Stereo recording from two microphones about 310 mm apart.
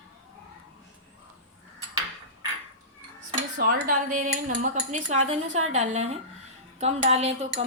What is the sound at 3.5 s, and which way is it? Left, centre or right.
Speech, right.